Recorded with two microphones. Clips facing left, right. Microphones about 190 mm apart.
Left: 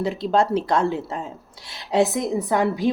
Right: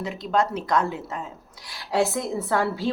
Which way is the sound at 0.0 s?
30° left (ahead or behind).